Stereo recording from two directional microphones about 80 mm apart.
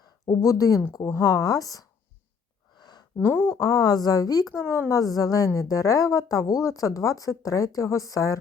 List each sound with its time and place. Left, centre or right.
0.4 s speech: left
3.2 s speech: left
3.5 s speech: left